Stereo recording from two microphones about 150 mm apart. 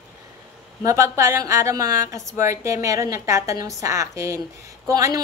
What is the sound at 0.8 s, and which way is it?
A woman's voice, 20° right (ahead or behind).